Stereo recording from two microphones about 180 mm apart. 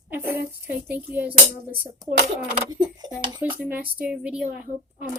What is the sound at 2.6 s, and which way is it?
Speech, 20° right (ahead or behind).